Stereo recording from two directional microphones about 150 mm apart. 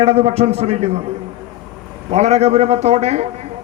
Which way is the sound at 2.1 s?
45° right (ahead or behind).